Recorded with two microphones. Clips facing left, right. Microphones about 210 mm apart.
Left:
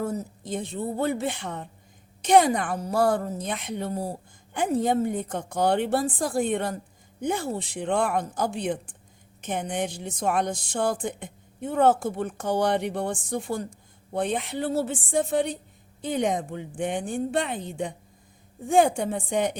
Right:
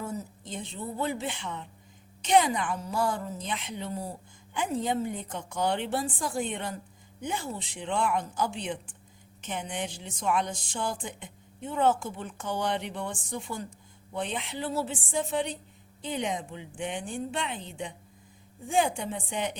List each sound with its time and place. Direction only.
0.7 s speech: 50° left (ahead or behind)
2.9 s speech: 60° left (ahead or behind)